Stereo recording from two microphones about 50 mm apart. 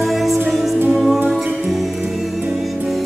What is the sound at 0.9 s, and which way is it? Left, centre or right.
Music, centre.